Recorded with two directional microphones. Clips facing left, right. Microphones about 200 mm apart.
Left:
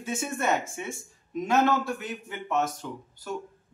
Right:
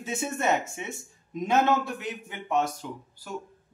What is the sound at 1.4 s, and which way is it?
Speech, 20° right (ahead or behind).